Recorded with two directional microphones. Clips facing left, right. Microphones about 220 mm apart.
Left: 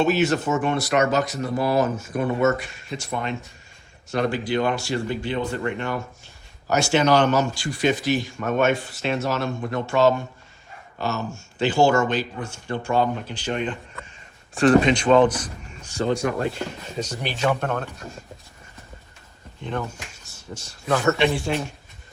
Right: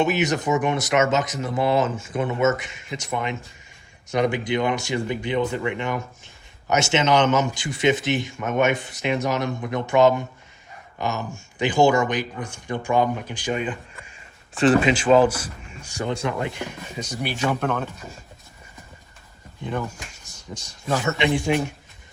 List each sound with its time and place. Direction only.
0.0 s speech: 15° right (ahead or behind)
4.1 s speech: 15° right (ahead or behind)
20.5 s speech: 15° right (ahead or behind)